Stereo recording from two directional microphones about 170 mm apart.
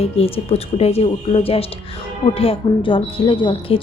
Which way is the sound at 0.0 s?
35° left (ahead or behind).